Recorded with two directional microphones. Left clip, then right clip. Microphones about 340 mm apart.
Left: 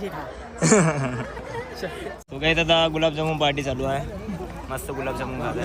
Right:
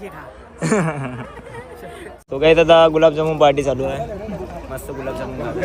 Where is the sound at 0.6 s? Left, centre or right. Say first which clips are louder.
Left 1 dB; centre.